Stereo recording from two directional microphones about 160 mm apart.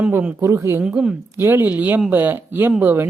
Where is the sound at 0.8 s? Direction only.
5° right (ahead or behind).